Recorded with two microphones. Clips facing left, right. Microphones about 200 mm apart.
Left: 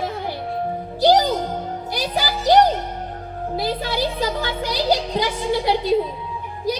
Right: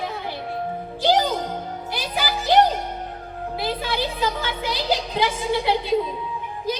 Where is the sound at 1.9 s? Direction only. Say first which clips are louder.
Left 2 dB; 40° left (ahead or behind).